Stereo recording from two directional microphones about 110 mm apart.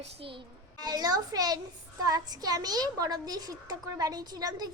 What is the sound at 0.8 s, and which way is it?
Speech, 35° right (ahead or behind).